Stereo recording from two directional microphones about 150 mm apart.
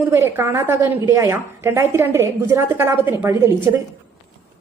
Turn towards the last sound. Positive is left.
turn(degrees=-15)  # may be behind; listen again after turning